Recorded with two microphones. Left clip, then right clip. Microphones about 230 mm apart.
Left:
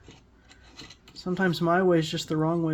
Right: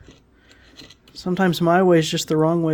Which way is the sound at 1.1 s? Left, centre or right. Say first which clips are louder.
Right 6 dB; right.